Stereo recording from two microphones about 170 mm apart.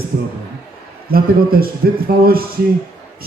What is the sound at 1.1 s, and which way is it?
A man's voice, 60° right (ahead or behind).